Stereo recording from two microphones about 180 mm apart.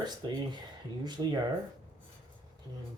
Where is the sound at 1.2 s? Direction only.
15° right (ahead or behind).